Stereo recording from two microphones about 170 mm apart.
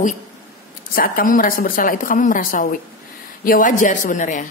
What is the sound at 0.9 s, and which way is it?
A woman's voice, 55° left (ahead or behind).